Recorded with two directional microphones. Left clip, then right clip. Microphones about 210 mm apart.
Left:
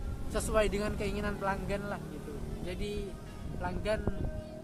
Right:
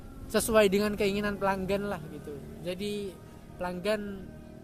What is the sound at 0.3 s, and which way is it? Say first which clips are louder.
Speech: right 7 dB; 45° right (ahead or behind).